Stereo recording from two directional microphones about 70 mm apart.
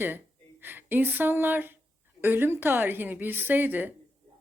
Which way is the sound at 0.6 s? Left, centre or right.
Right.